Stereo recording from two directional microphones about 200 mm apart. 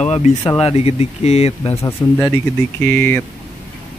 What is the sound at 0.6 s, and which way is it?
Speech, 30° left (ahead or behind).